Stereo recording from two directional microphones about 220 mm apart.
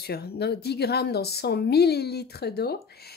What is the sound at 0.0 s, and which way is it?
Speech, 45° left (ahead or behind).